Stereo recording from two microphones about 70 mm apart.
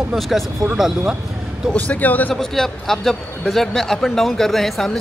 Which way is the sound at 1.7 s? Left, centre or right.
Left.